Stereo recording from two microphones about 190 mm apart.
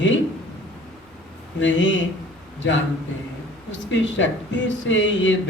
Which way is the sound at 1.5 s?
75° left (ahead or behind).